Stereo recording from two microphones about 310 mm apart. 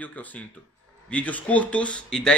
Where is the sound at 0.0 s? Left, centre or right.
Centre.